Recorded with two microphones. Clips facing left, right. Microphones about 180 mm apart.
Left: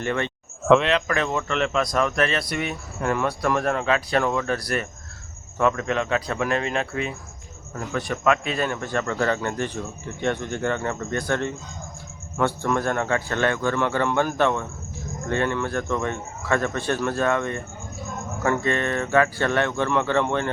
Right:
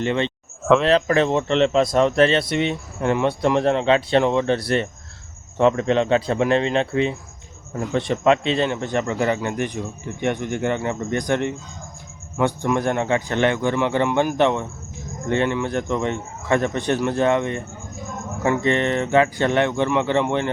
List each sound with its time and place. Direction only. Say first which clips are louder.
0.0 s speech: right 4 dB; 20° right (ahead or behind)
0.6 s speech: even; centre (ahead or behind)
0.9 s speech: right 6 dB; 35° right (ahead or behind); by 20.5 s 15° right (ahead or behind)